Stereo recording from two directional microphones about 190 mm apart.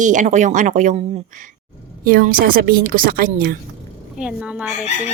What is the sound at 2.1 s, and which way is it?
A woman's voice, 50° right (ahead or behind).